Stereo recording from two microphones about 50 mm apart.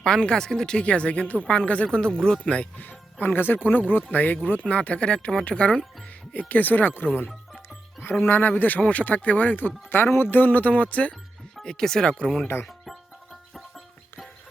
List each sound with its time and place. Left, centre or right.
0.0 s speech: centre
2.4 s speech: left
2.8 s speech: left
6.5 s speech: left
7.3 s music: centre
8.2 s speech: left
11.6 s speech: centre
12.6 s music: centre